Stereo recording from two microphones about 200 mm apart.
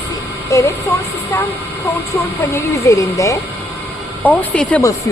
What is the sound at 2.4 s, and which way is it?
Speech, 15° left (ahead or behind).